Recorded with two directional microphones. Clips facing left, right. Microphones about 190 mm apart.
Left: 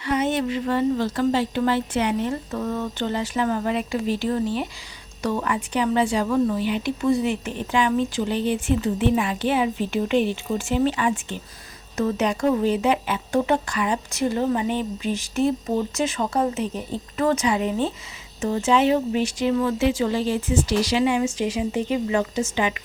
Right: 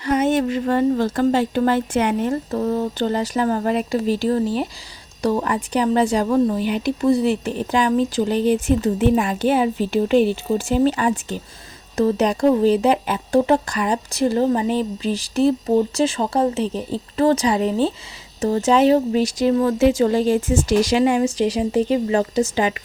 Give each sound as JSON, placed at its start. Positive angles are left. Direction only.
{"t": 0.0, "sound": "speech", "side_deg": -45}